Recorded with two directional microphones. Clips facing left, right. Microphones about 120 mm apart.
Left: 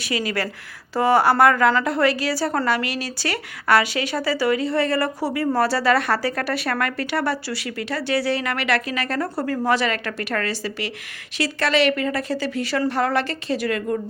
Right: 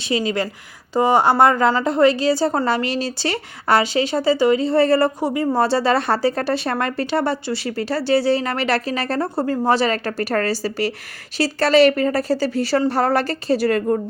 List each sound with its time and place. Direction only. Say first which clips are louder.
0.0 s a woman's voice: right 4 dB; 25° right (ahead or behind)